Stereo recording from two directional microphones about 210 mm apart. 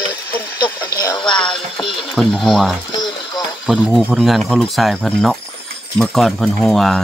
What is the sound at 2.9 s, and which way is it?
Speech, 20° left (ahead or behind).